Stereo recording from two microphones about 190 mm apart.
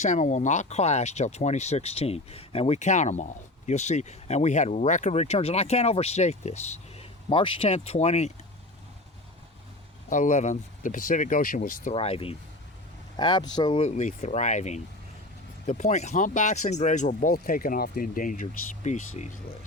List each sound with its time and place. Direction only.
0.0 s speech: 40° left (ahead or behind)
10.1 s speech: 40° left (ahead or behind)
11.9 s speech: 30° left (ahead or behind)
13.8 s speech: 35° left (ahead or behind)